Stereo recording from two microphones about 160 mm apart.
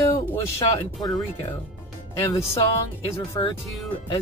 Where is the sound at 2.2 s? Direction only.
20° left (ahead or behind).